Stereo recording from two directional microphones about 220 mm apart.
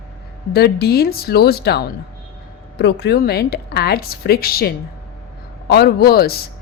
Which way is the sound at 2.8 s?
50° left (ahead or behind).